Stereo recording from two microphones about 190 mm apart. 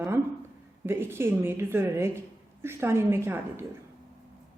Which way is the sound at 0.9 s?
10° right (ahead or behind).